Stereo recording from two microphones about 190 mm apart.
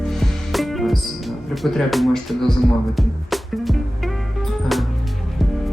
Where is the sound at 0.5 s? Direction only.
Centre (ahead or behind).